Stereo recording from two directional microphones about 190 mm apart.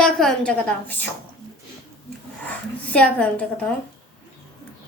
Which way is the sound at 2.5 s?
5° left (ahead or behind).